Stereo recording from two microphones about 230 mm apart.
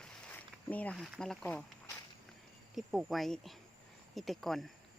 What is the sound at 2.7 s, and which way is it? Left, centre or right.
A woman's voice, centre.